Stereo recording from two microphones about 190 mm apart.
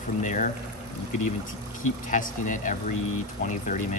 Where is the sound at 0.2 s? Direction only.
40° left (ahead or behind).